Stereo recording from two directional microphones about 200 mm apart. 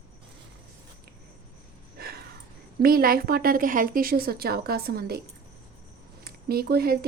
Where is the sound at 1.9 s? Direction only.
50° right (ahead or behind).